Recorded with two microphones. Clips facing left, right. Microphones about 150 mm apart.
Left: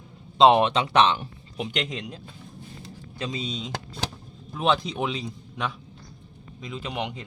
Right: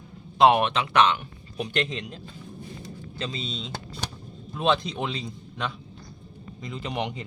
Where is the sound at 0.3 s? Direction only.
25° left (ahead or behind).